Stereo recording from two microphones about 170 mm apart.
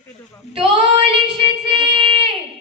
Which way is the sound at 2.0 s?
30° right (ahead or behind).